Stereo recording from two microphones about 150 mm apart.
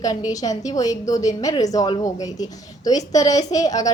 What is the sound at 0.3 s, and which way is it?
A woman's voice, 25° left (ahead or behind).